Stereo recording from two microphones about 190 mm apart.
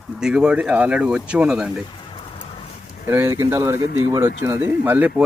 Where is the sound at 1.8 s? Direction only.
25° left (ahead or behind).